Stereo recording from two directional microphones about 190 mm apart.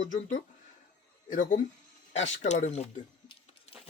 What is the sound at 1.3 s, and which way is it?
Speech, 45° left (ahead or behind).